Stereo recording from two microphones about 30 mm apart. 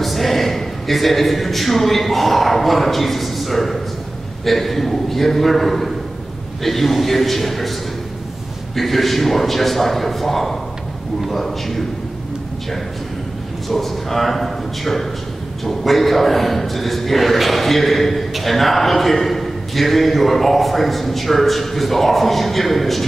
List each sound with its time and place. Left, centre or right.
0.0 s a man's voice: centre
8.7 s a man's voice: centre
13.7 s a man's voice: centre